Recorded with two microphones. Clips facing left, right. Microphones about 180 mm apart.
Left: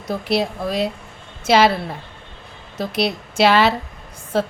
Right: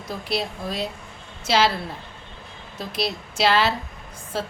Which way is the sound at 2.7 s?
70° left (ahead or behind).